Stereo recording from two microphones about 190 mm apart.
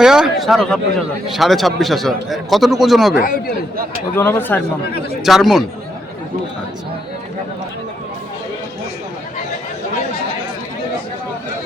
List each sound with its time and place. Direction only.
0.0 s speech: 5° right (ahead or behind)
3.2 s speech: 50° left (ahead or behind)
4.1 s speech: 10° left (ahead or behind)
5.2 s speech: centre (ahead or behind)